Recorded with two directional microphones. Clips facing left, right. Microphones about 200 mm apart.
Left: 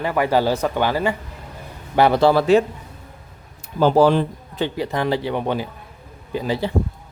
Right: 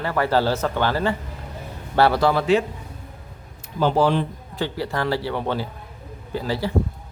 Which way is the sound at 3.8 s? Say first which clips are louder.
Left 4 dB; 45° left (ahead or behind).